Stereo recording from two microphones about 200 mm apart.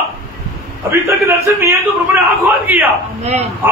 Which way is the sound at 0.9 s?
15° right (ahead or behind).